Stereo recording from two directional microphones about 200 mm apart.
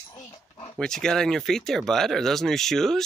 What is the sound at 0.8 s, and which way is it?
Speech, 5° left (ahead or behind).